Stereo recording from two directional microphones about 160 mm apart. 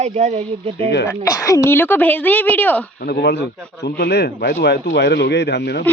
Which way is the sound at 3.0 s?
90° left.